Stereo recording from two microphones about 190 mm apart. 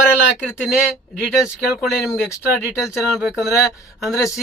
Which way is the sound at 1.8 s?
5° right (ahead or behind).